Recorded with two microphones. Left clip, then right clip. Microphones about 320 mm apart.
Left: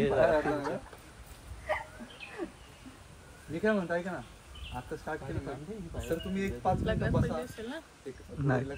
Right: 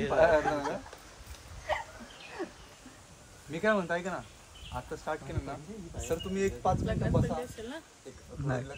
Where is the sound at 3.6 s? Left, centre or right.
Centre.